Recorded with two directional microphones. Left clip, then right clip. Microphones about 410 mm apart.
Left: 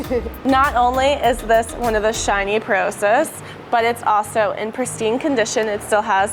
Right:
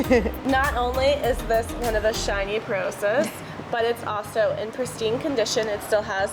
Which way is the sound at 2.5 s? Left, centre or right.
Left.